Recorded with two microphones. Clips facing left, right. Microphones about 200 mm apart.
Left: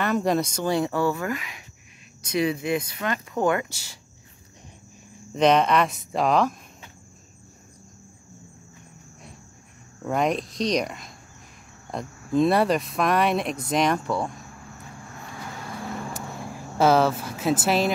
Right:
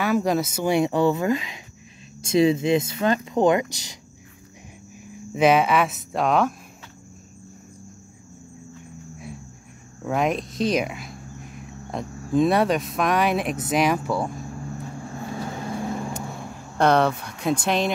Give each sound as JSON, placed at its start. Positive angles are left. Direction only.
{"t": 0.0, "sound": "speech", "side_deg": 0}
{"t": 5.3, "sound": "speech", "side_deg": -5}
{"t": 10.0, "sound": "speech", "side_deg": 0}
{"t": 15.1, "sound": "vehicle", "side_deg": -30}
{"t": 16.7, "sound": "speech", "side_deg": 5}